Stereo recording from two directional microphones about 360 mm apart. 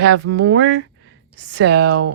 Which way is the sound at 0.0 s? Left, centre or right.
Right.